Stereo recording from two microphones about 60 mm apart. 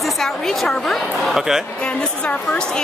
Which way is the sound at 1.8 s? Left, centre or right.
Centre.